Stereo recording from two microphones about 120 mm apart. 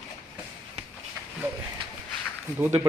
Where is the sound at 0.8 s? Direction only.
65° right (ahead or behind).